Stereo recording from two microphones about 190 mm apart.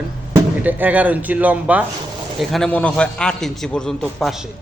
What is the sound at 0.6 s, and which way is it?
A man's voice, 10° right (ahead or behind).